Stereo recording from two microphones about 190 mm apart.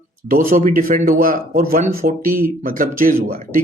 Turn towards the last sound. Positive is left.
turn(degrees=-50)  # may be behind; listen again after turning